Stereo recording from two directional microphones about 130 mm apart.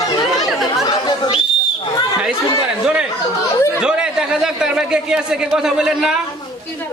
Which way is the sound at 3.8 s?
5° right (ahead or behind).